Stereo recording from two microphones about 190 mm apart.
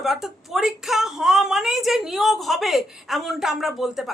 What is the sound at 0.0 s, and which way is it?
A woman's voice, centre (ahead or behind).